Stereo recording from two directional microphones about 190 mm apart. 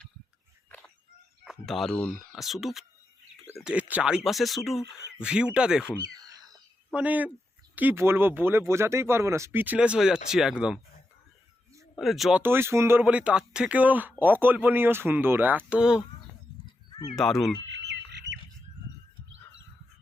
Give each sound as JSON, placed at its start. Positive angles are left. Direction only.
{"t": 1.5, "sound": "speech", "side_deg": 0}
{"t": 11.9, "sound": "speech", "side_deg": 0}
{"t": 17.2, "sound": "speech", "side_deg": 0}
{"t": 17.7, "sound": "bird", "side_deg": -65}
{"t": 19.3, "sound": "bird", "side_deg": -80}